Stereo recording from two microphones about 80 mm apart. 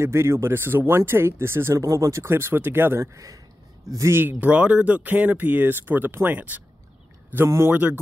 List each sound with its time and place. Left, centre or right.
0.0 s speech: right
3.0 s speech: right
4.1 s speech: right
7.4 s speech: right
7.7 s speech: centre